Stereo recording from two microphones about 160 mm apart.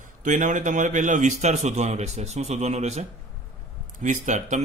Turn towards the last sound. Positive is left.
turn(degrees=-50)  # may be behind; listen again after turning